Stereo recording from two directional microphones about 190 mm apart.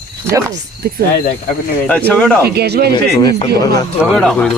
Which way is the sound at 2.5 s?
55° right (ahead or behind).